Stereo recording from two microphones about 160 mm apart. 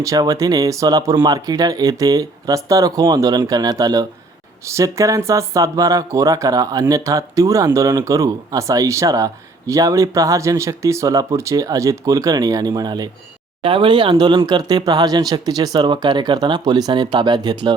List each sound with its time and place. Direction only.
0.0 s speech: 20° right (ahead or behind)